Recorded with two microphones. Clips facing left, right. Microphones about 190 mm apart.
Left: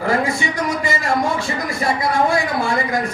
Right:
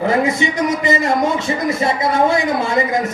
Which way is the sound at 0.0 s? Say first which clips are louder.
Right 3 dB; 20° right (ahead or behind).